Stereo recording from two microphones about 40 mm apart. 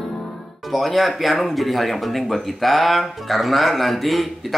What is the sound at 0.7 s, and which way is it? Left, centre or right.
Speech, centre.